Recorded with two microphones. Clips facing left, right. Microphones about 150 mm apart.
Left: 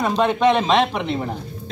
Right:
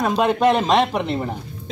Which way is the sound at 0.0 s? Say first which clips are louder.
Even; 5° right (ahead or behind).